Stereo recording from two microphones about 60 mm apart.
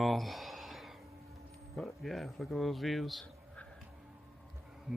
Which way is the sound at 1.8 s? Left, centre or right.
Centre.